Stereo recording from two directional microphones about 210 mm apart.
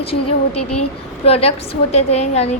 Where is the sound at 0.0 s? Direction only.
30° left (ahead or behind).